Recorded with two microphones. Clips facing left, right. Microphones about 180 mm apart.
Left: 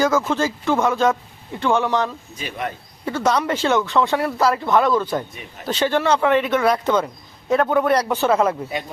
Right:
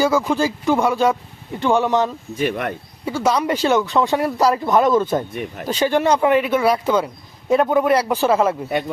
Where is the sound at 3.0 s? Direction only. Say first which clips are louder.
Right 1 dB; 10° right (ahead or behind).